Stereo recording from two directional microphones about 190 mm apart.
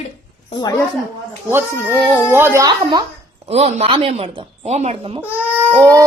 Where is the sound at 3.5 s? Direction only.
35° right (ahead or behind).